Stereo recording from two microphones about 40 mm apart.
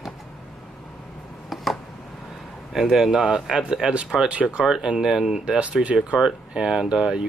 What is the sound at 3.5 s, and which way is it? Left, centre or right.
Speech, right.